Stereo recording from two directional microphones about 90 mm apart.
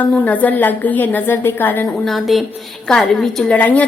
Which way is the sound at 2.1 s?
Centre (ahead or behind).